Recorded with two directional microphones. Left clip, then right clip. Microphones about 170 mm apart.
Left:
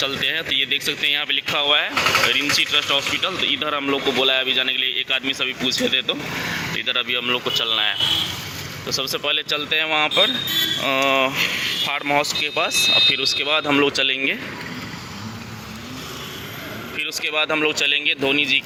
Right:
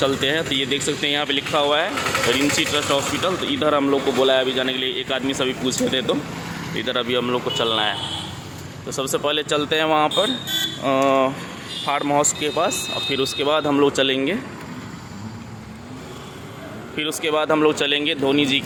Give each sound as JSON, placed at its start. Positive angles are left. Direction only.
{"t": 0.0, "sound": "a man's voice", "side_deg": -10}
{"t": 2.0, "sound": "a man's voice", "side_deg": -60}
{"t": 3.2, "sound": "a man's voice", "side_deg": -15}
{"t": 8.9, "sound": "a man's voice", "side_deg": -25}
{"t": 17.0, "sound": "a man's voice", "side_deg": -15}